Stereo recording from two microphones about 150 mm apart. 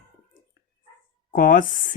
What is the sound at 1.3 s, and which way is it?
Speech, 60° left (ahead or behind).